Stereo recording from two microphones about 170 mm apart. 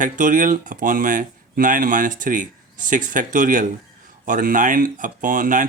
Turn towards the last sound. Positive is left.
turn(degrees=-50)  # may be behind; listen again after turning